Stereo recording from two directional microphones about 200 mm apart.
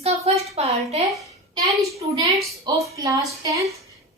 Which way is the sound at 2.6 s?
15° right (ahead or behind).